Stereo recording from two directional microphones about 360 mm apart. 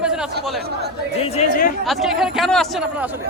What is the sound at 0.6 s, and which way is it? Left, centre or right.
Battle cry, right.